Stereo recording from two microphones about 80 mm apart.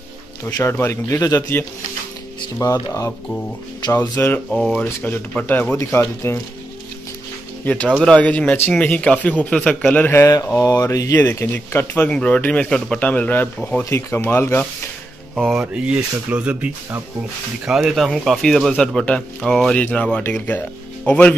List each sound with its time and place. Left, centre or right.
0.7 s a man's voice: left
4.5 s speech: centre
5.0 s speech: centre
5.9 s a man's voice: left
7.6 s speech: centre
10.4 s a man's voice: left
11.1 s speech: left
15.5 s speech: centre
17.6 s speech: centre